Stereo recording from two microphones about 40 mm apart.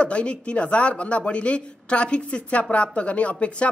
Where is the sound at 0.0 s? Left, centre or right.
Left.